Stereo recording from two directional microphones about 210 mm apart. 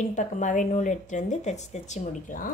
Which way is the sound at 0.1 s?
35° left (ahead or behind).